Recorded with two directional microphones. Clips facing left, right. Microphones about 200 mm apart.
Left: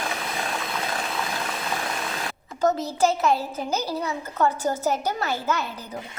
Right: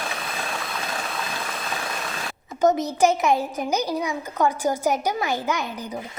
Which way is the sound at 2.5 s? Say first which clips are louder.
Right 3 dB; 20° right (ahead or behind).